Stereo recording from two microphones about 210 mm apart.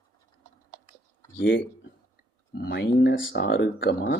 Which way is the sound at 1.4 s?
65° left (ahead or behind).